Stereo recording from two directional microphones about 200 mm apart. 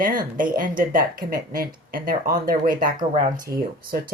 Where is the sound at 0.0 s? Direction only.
40° right (ahead or behind).